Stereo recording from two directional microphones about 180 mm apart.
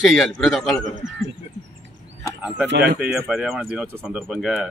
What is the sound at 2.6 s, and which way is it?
Speech, 65° right (ahead or behind).